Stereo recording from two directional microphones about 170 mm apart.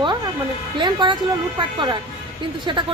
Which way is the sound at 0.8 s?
25° right (ahead or behind).